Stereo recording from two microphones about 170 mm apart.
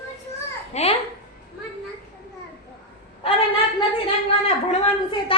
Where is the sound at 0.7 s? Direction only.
40° left (ahead or behind).